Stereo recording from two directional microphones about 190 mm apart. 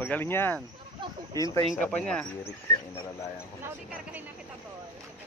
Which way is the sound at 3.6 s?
10° right (ahead or behind).